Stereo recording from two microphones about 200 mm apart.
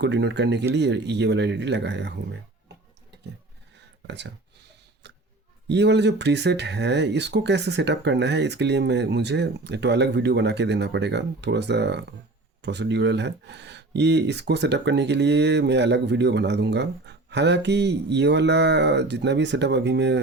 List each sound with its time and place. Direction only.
0.0 s speech: 60° right (ahead or behind)
3.8 s a sound: 60° right (ahead or behind)
5.6 s speech: 60° right (ahead or behind)